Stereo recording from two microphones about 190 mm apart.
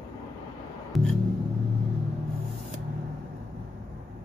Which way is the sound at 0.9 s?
Centre (ahead or behind).